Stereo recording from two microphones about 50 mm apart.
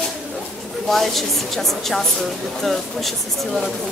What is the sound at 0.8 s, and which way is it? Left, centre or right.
Speech, centre.